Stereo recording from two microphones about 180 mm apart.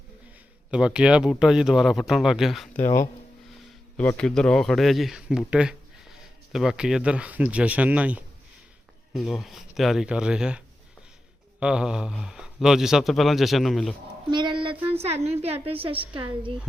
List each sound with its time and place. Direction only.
0.7 s a man's voice: 5° right (ahead or behind)
11.6 s speech: 5° right (ahead or behind)
14.3 s a woman's voice: 25° right (ahead or behind)